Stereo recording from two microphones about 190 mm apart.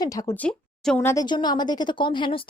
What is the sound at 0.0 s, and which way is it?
A woman's voice, 20° left (ahead or behind).